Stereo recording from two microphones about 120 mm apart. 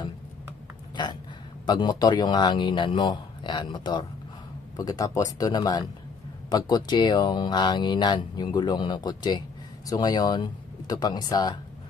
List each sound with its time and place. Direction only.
1.7 s speech: 35° left (ahead or behind)
4.7 s speech: 30° left (ahead or behind)